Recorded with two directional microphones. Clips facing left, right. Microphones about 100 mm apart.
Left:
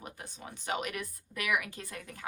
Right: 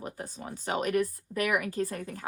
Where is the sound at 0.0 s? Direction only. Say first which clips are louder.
Right 6 dB; 40° right (ahead or behind).